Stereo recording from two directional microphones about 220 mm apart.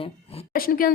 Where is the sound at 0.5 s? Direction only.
40° left (ahead or behind).